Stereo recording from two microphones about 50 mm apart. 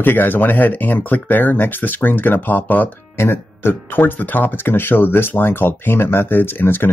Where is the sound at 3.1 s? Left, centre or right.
Left.